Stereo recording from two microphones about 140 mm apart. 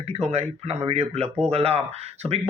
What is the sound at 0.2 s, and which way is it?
Speech, 50° right (ahead or behind).